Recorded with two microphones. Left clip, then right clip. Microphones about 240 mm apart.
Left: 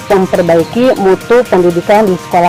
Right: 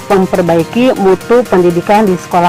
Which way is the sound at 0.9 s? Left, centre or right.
Right.